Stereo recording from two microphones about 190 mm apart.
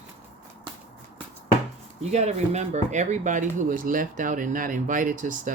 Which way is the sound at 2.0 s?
35° right (ahead or behind).